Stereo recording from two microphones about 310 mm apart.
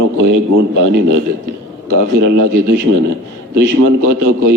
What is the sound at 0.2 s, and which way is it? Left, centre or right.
Speech, right.